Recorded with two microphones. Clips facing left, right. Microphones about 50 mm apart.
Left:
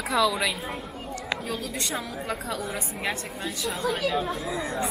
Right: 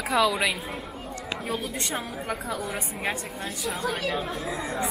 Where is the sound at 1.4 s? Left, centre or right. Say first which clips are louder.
Right 1 dB; right.